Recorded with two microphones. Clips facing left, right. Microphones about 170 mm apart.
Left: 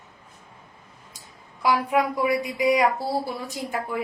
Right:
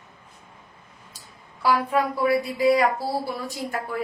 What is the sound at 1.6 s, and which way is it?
A woman's voice, 15° left (ahead or behind).